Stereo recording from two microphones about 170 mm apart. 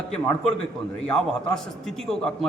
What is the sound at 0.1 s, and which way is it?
A man's voice, 5° left (ahead or behind).